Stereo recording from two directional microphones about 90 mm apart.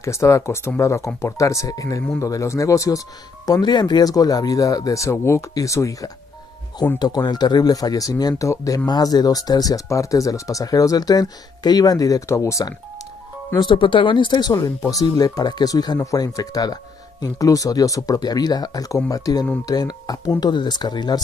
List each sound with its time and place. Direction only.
0.0 s speech: 35° left (ahead or behind)
3.4 s speech: 50° left (ahead or behind)
7.0 s speech: 50° left (ahead or behind)
13.6 s speech: 65° left (ahead or behind)
14.5 s speech: 40° left (ahead or behind)